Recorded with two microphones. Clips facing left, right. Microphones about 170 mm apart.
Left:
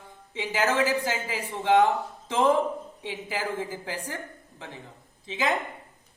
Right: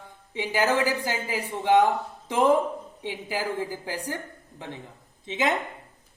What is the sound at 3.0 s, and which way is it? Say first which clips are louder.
A woman's voice: right 2 dB; 15° right (ahead or behind).